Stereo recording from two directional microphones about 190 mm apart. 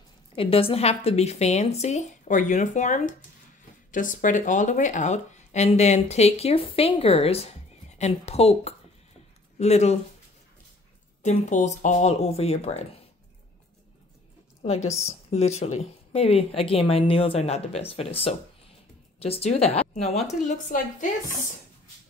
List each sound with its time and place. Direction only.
0.4 s speech: 30° left (ahead or behind)
11.2 s speech: 40° left (ahead or behind)
14.6 s speech: 35° left (ahead or behind)